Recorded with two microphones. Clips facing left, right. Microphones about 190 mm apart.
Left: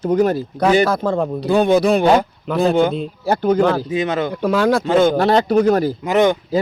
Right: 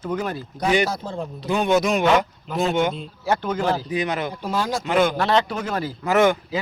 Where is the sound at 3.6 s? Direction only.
60° left (ahead or behind).